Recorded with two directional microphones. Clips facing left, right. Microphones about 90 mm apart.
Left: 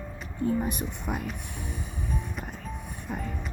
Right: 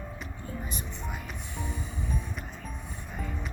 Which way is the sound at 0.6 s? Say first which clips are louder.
Left 6 dB; 60° left (ahead or behind).